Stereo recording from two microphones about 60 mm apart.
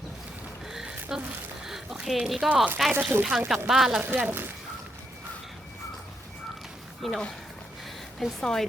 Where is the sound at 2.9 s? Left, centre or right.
Right.